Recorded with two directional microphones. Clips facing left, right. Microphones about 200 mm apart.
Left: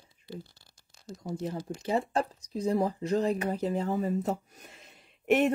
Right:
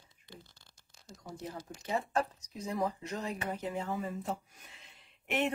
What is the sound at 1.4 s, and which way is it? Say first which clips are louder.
Speech: left 7 dB; 30° left (ahead or behind).